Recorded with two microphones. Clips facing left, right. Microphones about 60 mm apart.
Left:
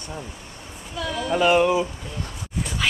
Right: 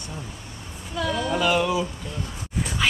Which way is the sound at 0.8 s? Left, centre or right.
Centre.